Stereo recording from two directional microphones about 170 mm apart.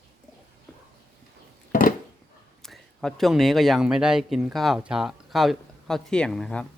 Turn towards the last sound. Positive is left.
turn(degrees=5)  # may be behind; listen again after turning